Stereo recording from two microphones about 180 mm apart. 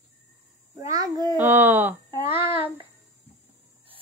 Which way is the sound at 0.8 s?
20° right (ahead or behind).